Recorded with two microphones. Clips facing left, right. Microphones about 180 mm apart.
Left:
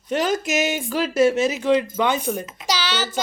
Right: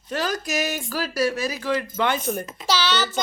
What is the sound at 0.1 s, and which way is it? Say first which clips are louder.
A child's voice: left 5 dB; 20° left (ahead or behind).